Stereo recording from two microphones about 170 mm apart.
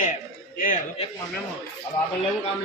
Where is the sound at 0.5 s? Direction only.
50° left (ahead or behind).